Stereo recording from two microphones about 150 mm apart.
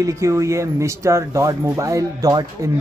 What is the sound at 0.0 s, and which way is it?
Speech, 20° right (ahead or behind).